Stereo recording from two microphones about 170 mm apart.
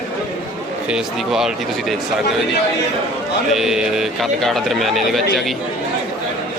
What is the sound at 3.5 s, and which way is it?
A man's voice, centre (ahead or behind).